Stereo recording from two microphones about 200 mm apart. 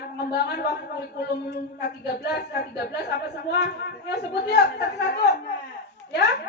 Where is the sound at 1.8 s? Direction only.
55° left (ahead or behind).